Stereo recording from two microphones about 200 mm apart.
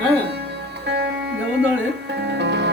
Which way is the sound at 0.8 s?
60° right (ahead or behind).